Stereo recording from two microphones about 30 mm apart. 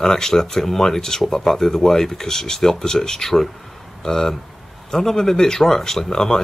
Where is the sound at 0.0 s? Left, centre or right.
Centre.